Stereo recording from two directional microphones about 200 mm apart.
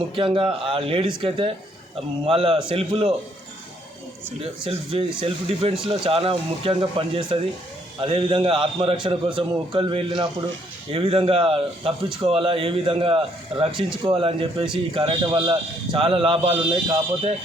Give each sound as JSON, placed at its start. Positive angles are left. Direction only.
{"t": 0.2, "sound": "a man's voice", "side_deg": -25}
{"t": 4.6, "sound": "a man's voice", "side_deg": -25}